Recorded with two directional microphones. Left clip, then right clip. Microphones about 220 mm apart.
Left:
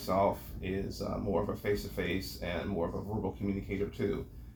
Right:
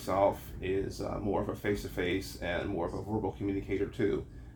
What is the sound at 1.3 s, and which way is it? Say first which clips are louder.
Speech: even; 45° right (ahead or behind).